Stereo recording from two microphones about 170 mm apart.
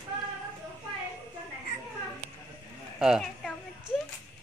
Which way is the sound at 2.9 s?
5° right (ahead or behind).